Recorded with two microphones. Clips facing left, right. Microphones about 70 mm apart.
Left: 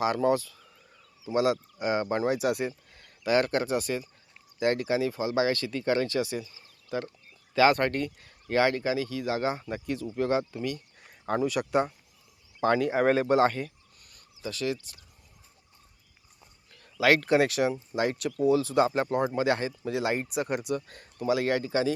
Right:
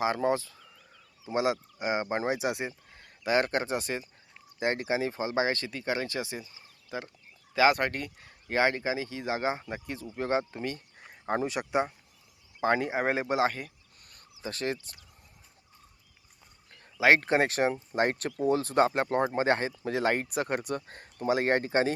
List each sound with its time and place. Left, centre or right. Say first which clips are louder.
0.0 s speech: left 2 dB; right
5.7 s speech: left 5 dB; centre
14.0 s owl: right 3 dB; right
14.4 s speech: left 2 dB; right
16.7 s speech: even; right
20.8 s speech: left 1 dB; right